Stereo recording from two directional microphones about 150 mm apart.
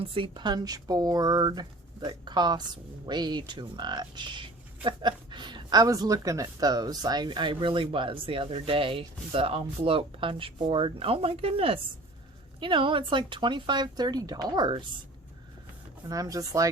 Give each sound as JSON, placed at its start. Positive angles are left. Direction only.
{"t": 0.0, "sound": "speech", "side_deg": -35}
{"t": 16.0, "sound": "speech", "side_deg": -25}